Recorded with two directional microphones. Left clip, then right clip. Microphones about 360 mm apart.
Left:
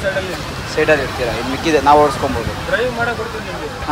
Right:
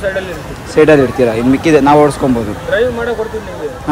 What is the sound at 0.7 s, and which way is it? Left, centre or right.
Speech, right.